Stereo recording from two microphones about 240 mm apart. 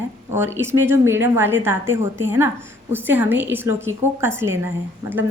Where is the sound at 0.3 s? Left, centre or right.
Centre.